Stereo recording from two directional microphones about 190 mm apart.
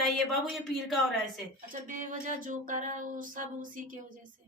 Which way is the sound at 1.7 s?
45° right (ahead or behind).